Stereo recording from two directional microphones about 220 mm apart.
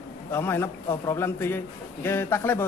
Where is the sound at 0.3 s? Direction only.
10° left (ahead or behind).